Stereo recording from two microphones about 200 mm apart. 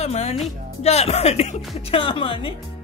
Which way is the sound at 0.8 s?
30° left (ahead or behind).